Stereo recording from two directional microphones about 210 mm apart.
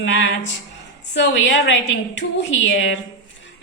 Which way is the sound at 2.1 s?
60° left (ahead or behind).